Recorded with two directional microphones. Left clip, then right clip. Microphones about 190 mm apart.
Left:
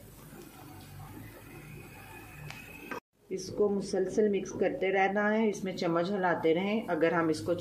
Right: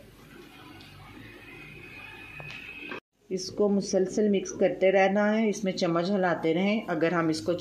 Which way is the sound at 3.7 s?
35° right (ahead or behind).